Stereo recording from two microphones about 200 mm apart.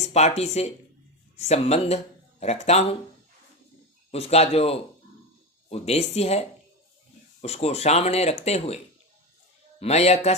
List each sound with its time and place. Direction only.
0.1 s speech: 35° left (ahead or behind)
4.1 s speech: 30° left (ahead or behind)
7.4 s speech: 30° left (ahead or behind)
9.8 s speech: 30° left (ahead or behind)